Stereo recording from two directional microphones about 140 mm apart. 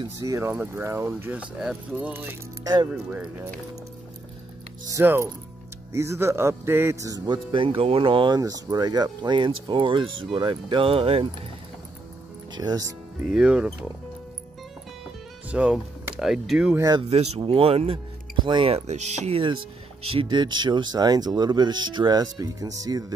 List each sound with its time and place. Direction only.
0.2 s speech: 20° right (ahead or behind)
2.6 s speech: 30° right (ahead or behind)
2.9 s speech: 10° right (ahead or behind)
4.8 s speech: 20° right (ahead or behind); by 8.4 s 35° right (ahead or behind)
8.4 s speech: 25° right (ahead or behind); by 11.2 s 45° right (ahead or behind)
12.5 s speech: 25° right (ahead or behind)
13.3 s speech: 5° right (ahead or behind)
15.5 s speech: 5° right (ahead or behind)
16.7 s speech: 25° right (ahead or behind)
17.1 s speech: 50° right (ahead or behind)
18.7 s speech: 55° right (ahead or behind); by 23.1 s 25° right (ahead or behind)